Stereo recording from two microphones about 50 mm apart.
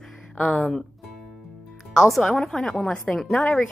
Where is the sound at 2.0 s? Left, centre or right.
Centre.